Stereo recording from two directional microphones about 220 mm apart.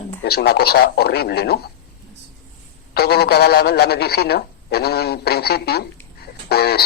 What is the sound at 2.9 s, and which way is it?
A man's voice, 45° left (ahead or behind).